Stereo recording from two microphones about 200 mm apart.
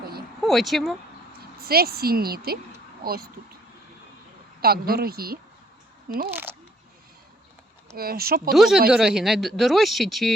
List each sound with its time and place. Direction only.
0.4 s speech: centre (ahead or behind)
1.3 s speech: 50° right (ahead or behind)
4.6 s a woman's voice: 50° right (ahead or behind)
6.3 s a sound: 10° right (ahead or behind)
7.9 s a woman's voice: 50° right (ahead or behind)
8.5 s speech: centre (ahead or behind)